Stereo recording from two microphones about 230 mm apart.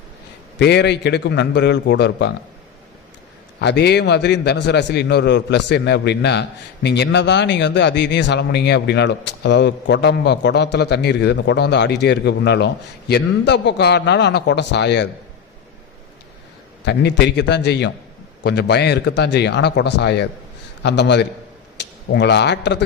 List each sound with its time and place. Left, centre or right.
0.6 s a man's voice: left
3.6 s a man's voice: left
16.8 s a man's voice: left